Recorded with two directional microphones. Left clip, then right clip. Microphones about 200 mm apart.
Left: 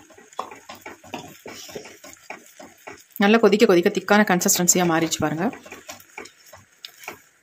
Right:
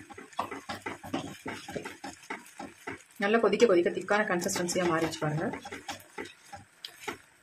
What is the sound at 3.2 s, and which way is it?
Speech, 55° left (ahead or behind).